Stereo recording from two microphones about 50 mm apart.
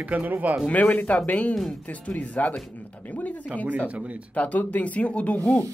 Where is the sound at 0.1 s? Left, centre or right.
Right.